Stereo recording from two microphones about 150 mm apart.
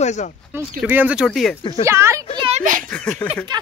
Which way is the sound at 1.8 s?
20° right (ahead or behind).